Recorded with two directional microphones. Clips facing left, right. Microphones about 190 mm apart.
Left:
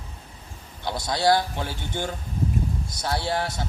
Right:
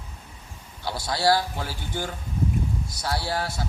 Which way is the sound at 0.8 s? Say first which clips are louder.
Left 1 dB; 20° left (ahead or behind).